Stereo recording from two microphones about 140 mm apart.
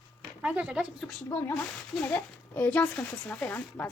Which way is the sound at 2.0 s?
15° left (ahead or behind).